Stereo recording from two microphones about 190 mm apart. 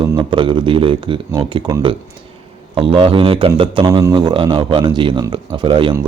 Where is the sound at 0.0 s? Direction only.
25° right (ahead or behind).